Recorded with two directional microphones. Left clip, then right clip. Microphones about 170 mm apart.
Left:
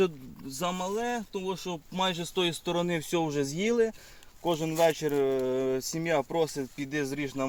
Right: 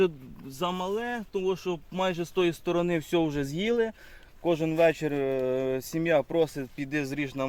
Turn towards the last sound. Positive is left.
turn(degrees=-50)  # may be behind; listen again after turning